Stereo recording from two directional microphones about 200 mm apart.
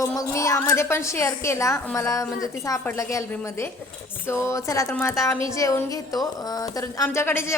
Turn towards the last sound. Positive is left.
turn(degrees=10)  # may be behind; listen again after turning